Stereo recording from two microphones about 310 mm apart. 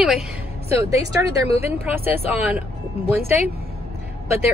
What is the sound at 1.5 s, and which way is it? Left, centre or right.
Speech, centre.